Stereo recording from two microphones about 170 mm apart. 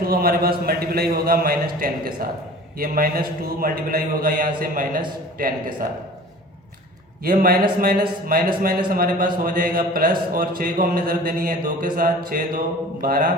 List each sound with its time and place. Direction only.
0.0 s a man's voice: 60° right (ahead or behind)
7.3 s a man's voice: 55° right (ahead or behind)